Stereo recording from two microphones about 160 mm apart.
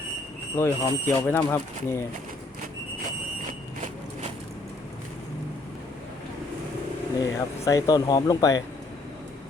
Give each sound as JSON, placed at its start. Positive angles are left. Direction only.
{"t": 0.5, "sound": "speech", "side_deg": 15}
{"t": 7.2, "sound": "speech", "side_deg": 20}